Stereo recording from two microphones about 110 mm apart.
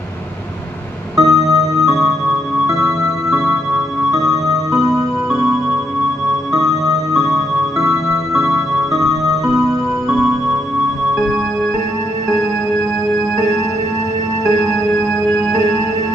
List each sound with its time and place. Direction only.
1.1 s music: 35° right (ahead or behind)
2.8 s music: 5° right (ahead or behind)
8.3 s music: 5° right (ahead or behind)